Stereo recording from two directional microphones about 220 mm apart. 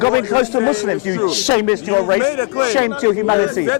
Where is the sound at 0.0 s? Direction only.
25° left (ahead or behind).